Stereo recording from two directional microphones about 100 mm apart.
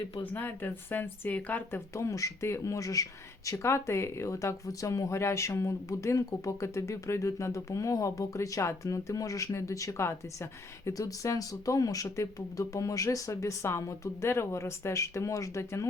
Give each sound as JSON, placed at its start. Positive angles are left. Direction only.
{"t": 0.2, "sound": "speech", "side_deg": 15}
{"t": 2.0, "sound": "speech", "side_deg": 30}